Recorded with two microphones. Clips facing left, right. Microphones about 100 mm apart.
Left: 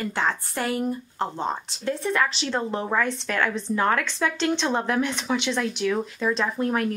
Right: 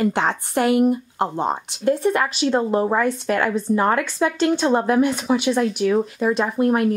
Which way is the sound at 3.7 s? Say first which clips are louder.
Right 7 dB; 5° right (ahead or behind).